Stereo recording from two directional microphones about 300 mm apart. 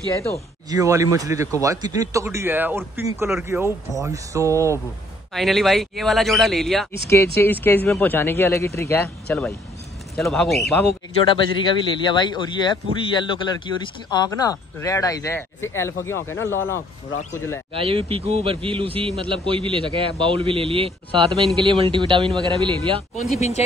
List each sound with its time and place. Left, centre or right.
0.1 s speech: centre
0.7 s speech: centre
5.3 s speech: centre
17.7 s speech: centre